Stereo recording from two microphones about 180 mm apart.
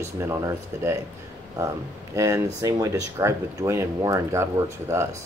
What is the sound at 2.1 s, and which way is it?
Speech, 20° right (ahead or behind).